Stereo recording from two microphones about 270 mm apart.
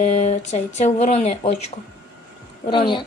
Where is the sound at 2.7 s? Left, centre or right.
Centre.